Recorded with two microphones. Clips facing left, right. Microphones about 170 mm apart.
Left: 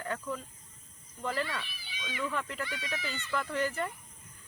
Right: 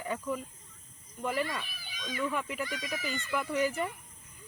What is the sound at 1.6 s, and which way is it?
Speech, 45° right (ahead or behind).